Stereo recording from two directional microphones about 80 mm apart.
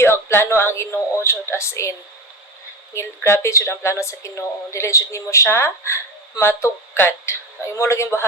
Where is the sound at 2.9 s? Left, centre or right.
Left.